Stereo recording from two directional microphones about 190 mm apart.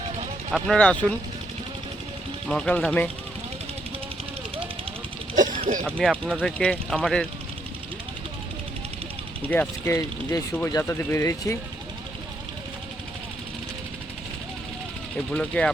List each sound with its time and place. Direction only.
0.5 s speech: 5° left (ahead or behind)
2.5 s speech: 5° left (ahead or behind)
5.3 s a sound: 40° right (ahead or behind)
6.1 s speech: 5° right (ahead or behind)
6.6 s speech: 5° left (ahead or behind)
9.5 s speech: 10° left (ahead or behind)
15.3 s speech: 5° left (ahead or behind)